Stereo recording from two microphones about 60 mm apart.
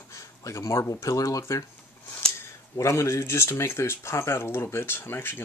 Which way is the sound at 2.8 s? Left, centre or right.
Left.